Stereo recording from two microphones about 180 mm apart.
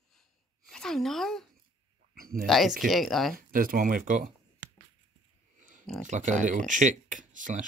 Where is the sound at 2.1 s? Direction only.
55° right (ahead or behind).